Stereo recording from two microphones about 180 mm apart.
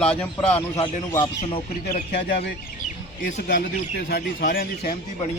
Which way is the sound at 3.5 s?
55° left (ahead or behind).